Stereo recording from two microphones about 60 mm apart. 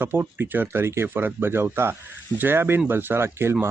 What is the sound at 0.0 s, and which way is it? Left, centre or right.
Speech, right.